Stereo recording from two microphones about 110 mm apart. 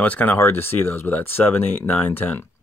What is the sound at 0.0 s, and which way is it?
Speech, 15° left (ahead or behind).